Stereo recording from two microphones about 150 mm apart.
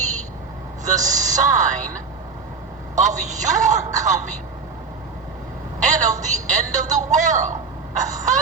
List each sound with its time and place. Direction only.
0.9 s speech: 55° right (ahead or behind)
2.9 s speech: 55° right (ahead or behind)
5.8 s a sound: 55° right (ahead or behind)
6.2 s speech: 55° right (ahead or behind)